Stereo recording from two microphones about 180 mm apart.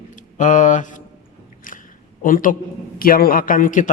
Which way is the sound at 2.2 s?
50° left (ahead or behind).